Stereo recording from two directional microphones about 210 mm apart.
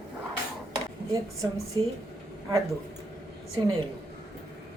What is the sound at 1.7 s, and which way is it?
Speech, 20° right (ahead or behind).